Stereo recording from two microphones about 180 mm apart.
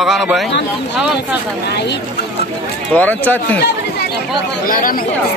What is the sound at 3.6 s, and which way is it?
Chatter, 65° left (ahead or behind).